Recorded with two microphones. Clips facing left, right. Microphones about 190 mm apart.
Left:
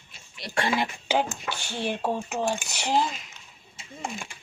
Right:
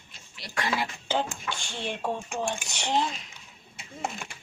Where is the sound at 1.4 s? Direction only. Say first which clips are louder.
Left 4 dB; 5° left (ahead or behind).